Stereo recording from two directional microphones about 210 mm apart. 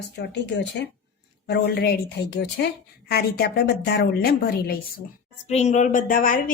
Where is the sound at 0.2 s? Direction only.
55° left (ahead or behind).